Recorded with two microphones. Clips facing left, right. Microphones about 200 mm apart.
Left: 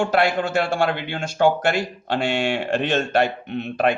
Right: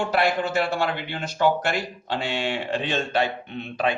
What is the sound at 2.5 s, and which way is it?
A man's voice, 45° left (ahead or behind).